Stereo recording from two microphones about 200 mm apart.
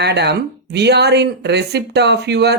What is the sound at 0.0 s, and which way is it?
Speech, 55° right (ahead or behind).